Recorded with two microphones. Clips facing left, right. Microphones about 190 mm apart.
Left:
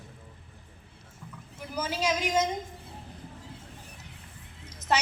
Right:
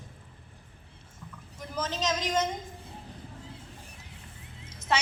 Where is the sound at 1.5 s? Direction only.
10° left (ahead or behind).